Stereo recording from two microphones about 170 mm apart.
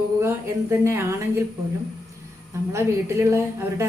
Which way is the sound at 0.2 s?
15° right (ahead or behind).